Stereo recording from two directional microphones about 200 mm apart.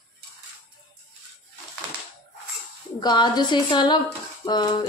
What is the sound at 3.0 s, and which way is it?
A woman's voice, 20° left (ahead or behind).